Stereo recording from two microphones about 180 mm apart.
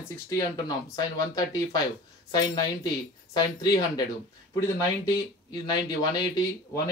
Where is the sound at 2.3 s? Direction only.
20° left (ahead or behind).